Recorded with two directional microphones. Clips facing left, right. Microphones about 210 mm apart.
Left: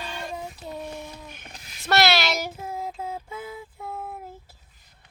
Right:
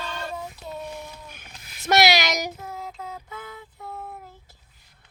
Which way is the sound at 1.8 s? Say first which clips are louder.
Right 1 dB; 15° right (ahead or behind).